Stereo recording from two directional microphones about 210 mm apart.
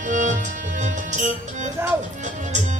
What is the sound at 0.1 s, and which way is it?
Music, 35° right (ahead or behind).